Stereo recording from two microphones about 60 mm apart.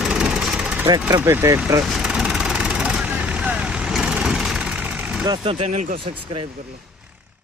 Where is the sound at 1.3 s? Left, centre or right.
Right.